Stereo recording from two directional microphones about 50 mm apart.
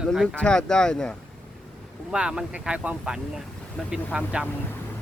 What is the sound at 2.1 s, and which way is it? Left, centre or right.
Speech, centre.